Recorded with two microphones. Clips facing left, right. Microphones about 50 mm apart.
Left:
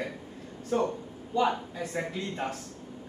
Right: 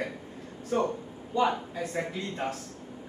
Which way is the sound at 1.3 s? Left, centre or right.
Centre.